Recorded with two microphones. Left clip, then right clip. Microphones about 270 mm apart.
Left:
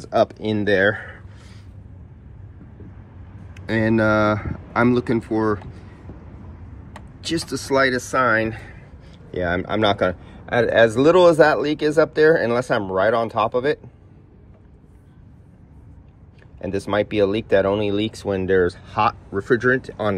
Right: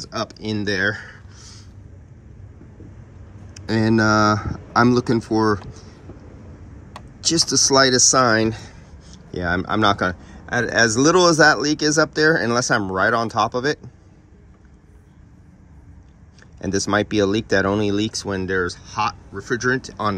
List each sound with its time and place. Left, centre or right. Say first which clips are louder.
0.1 s speech: left 8 dB; centre
3.6 s speech: even; centre
6.9 s speech: right 4 dB; centre
16.5 s speech: right 1 dB; centre